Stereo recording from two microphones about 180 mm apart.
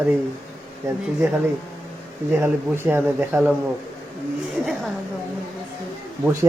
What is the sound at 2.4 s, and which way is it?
Speech, 10° right (ahead or behind).